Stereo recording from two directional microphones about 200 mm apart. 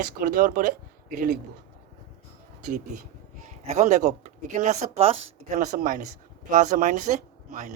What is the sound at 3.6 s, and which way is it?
Speech, 35° right (ahead or behind).